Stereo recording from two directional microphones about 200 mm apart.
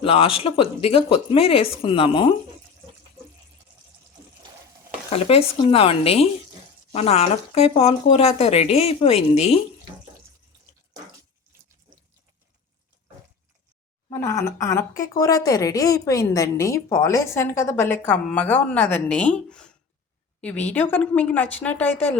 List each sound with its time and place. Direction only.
0.0 s speech: 30° left (ahead or behind)
5.1 s speech: 30° left (ahead or behind)
14.1 s a woman's voice: 15° left (ahead or behind)
20.7 s a woman's voice: 10° left (ahead or behind)